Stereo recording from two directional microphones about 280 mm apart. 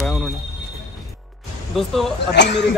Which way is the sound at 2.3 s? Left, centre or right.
Left.